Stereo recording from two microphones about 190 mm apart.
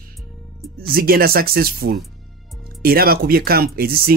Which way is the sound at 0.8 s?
50° right (ahead or behind).